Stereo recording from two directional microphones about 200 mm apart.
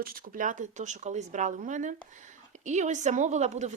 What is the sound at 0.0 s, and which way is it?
A woman's voice, 45° right (ahead or behind).